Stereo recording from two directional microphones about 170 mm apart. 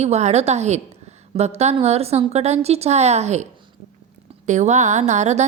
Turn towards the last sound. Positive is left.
turn(degrees=-40)  # may be behind; listen again after turning